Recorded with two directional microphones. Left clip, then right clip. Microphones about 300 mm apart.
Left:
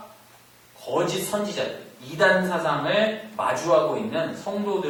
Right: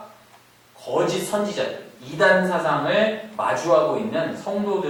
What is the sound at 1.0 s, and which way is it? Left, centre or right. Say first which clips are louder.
Speech: right 3 dB; centre.